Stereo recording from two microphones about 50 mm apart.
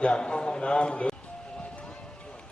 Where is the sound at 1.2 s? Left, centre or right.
Left.